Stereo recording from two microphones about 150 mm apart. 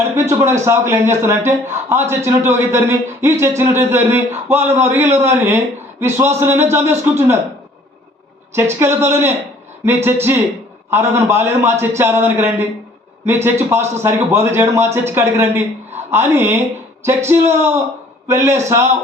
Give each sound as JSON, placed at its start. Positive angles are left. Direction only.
{"t": 0.2, "sound": "speech", "side_deg": -15}
{"t": 8.8, "sound": "a man's voice", "side_deg": -15}